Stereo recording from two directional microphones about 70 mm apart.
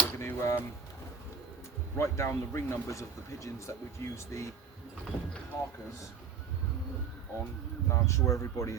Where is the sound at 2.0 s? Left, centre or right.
Left.